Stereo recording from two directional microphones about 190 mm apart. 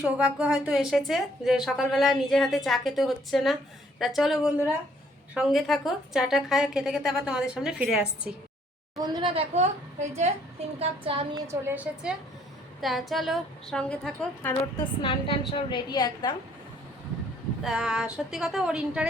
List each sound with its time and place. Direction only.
0.0 s a woman's voice: 5° right (ahead or behind)
9.0 s a woman's voice: 20° right (ahead or behind)
11.4 s a woman's voice: 10° right (ahead or behind)
15.0 s a woman's voice: 30° left (ahead or behind)
17.6 s a woman's voice: 5° right (ahead or behind)